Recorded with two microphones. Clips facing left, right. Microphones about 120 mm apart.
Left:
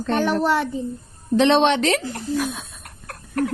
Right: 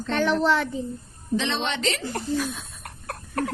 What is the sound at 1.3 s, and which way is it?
Speech, 60° left (ahead or behind).